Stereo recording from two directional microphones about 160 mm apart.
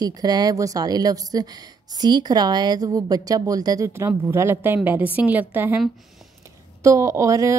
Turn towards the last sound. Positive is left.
turn(degrees=-20)  # may be behind; listen again after turning